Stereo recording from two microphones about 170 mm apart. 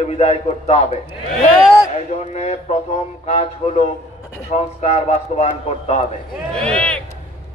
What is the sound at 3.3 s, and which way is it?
A man's voice, 35° left (ahead or behind).